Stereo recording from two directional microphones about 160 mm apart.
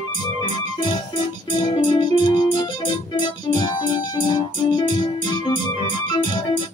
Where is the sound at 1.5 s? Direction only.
30° left (ahead or behind).